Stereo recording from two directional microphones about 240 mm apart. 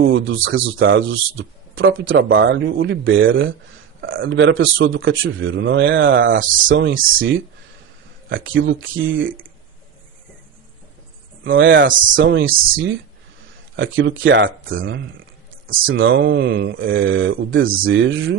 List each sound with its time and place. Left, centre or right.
0.0 s speech: right
11.4 s speech: right